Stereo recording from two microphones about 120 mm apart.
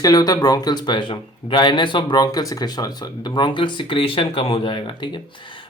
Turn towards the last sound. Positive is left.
turn(degrees=40)  # may be behind; listen again after turning